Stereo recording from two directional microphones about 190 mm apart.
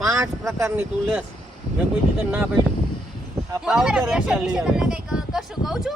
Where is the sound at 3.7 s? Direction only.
Centre (ahead or behind).